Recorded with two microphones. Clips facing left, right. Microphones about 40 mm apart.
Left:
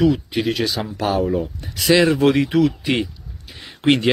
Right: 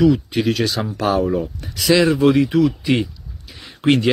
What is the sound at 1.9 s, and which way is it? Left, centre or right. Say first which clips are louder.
Speech: right 1 dB; left.